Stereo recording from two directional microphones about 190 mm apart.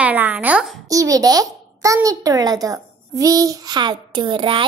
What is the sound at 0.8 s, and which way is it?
A child's voice, 20° right (ahead or behind).